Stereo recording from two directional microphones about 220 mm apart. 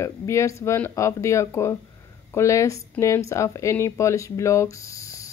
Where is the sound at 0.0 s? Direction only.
15° left (ahead or behind).